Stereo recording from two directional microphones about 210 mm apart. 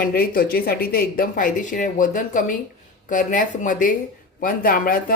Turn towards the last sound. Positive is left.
turn(degrees=45)  # may be behind; listen again after turning